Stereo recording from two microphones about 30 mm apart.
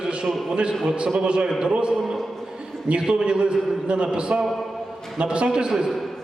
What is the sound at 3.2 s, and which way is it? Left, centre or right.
A man's voice, right.